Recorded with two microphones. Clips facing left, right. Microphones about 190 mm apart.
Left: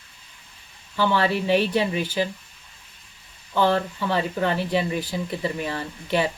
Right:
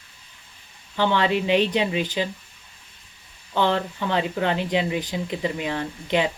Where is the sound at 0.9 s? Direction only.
20° right (ahead or behind).